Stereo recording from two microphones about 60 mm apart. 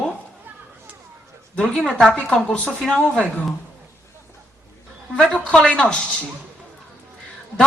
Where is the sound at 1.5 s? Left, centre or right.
Centre.